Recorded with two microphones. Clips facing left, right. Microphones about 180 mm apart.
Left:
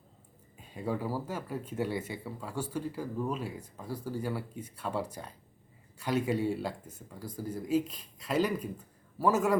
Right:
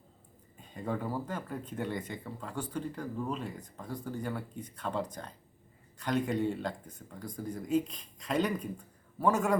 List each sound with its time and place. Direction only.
0.6 s speech: 5° left (ahead or behind)